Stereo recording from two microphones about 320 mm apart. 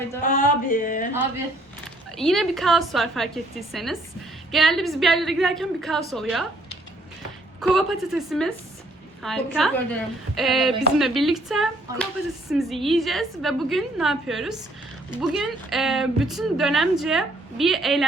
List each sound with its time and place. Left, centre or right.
0.3 s speech: left
2.1 s speech: centre
7.6 s speech: centre